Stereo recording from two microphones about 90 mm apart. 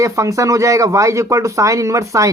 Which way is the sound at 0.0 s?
35° right (ahead or behind).